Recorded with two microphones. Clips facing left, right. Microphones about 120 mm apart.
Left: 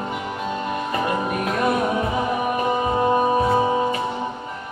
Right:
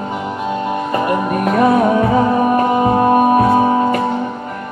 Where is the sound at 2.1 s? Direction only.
90° right.